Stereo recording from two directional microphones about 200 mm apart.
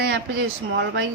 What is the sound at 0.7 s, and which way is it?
Speech, 60° right (ahead or behind).